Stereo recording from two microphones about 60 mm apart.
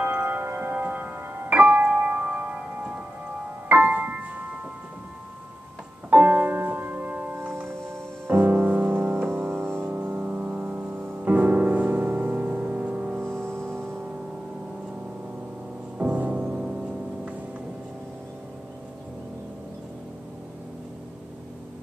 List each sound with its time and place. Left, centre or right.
0.0 s tubular bells: right
1.5 s tubular bells: right
3.3 s music: right
6.0 s music: right
9.8 s music: right
13.4 s music: right
16.0 s music: right